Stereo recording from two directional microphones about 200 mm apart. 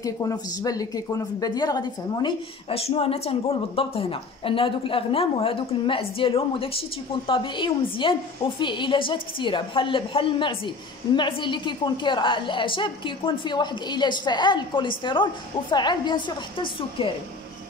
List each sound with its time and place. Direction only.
0.0 s a woman's voice: 15° left (ahead or behind)